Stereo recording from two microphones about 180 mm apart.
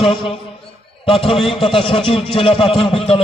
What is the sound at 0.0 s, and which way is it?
A man's voice, 30° left (ahead or behind).